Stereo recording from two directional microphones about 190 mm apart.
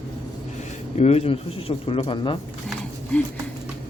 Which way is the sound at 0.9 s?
35° left (ahead or behind).